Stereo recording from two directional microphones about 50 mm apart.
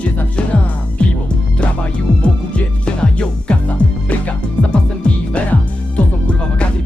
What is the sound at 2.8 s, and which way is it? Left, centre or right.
Music, left.